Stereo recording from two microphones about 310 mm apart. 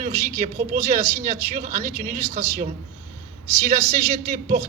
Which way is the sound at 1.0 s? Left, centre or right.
Centre.